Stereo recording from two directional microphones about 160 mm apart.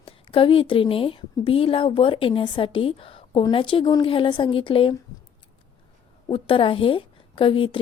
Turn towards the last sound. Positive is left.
turn(degrees=35)  # may be behind; listen again after turning